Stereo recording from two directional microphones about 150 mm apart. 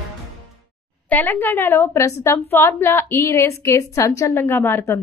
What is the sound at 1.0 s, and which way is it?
A woman's voice, 10° left (ahead or behind).